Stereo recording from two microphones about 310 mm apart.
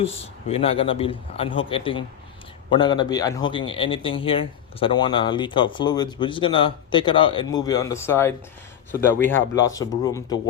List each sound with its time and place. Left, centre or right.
0.0 s a man's voice: centre